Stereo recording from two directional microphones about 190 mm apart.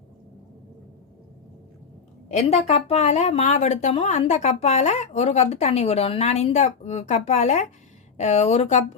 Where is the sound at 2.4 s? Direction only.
30° left (ahead or behind).